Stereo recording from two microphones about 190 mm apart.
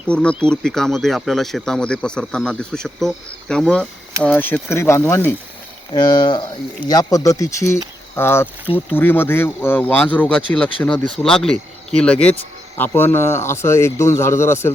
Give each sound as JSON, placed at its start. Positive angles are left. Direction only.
{"t": 0.1, "sound": "speech", "side_deg": 5}
{"t": 5.9, "sound": "speech", "side_deg": 20}
{"t": 8.6, "sound": "speech", "side_deg": -10}
{"t": 9.0, "sound": "speech", "side_deg": 10}